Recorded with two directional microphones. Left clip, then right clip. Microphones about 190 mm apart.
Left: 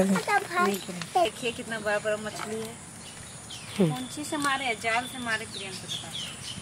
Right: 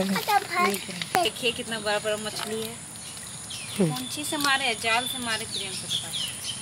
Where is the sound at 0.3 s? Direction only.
30° left (ahead or behind).